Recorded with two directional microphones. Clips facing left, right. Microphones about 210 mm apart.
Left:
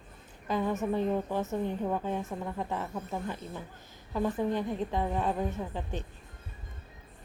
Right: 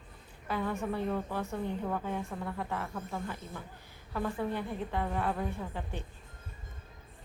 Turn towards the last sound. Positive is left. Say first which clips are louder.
# left 3 dB
turn(degrees=20)  # may be behind; listen again after turning